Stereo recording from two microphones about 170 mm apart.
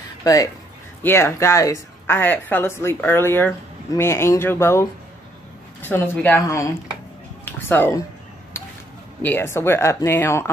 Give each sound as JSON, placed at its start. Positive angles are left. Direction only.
{"t": 0.2, "sound": "speech", "side_deg": 20}
{"t": 9.2, "sound": "speech", "side_deg": 10}